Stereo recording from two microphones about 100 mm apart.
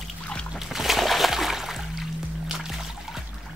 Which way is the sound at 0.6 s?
Centre (ahead or behind).